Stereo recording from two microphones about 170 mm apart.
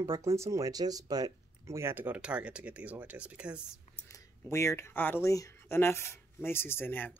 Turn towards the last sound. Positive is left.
turn(degrees=10)  # may be behind; listen again after turning